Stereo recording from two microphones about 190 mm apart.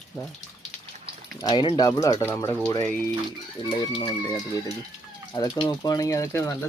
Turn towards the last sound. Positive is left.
turn(degrees=15)  # may be behind; listen again after turning